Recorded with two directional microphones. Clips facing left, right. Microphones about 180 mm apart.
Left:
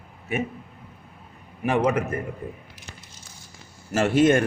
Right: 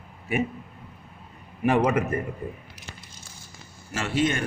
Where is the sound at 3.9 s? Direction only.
45° left (ahead or behind).